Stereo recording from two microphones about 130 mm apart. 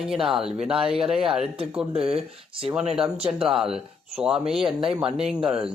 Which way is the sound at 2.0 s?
50° right (ahead or behind).